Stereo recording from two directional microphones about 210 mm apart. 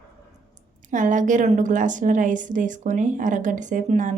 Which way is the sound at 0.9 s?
40° right (ahead or behind).